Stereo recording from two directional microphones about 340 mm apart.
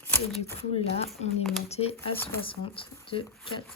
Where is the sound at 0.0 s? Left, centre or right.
Centre.